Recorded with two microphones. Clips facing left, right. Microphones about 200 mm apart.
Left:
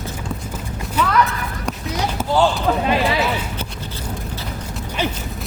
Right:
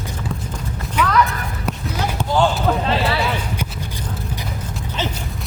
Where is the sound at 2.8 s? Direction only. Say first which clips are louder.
Left 2 dB; 15° left (ahead or behind).